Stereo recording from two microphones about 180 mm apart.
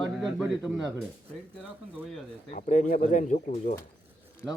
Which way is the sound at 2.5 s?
45° left (ahead or behind).